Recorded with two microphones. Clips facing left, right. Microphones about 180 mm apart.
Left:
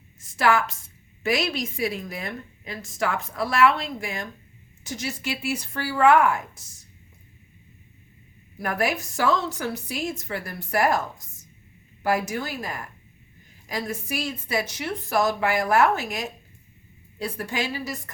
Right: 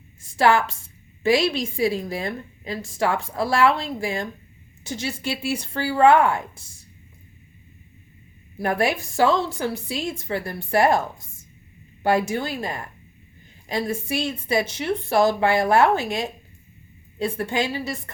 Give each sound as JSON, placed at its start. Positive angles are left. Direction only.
{"t": 0.2, "sound": "a woman's voice", "side_deg": -30}
{"t": 8.5, "sound": "a woman's voice", "side_deg": -25}